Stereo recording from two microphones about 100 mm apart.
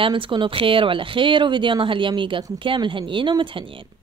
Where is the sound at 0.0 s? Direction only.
55° right (ahead or behind).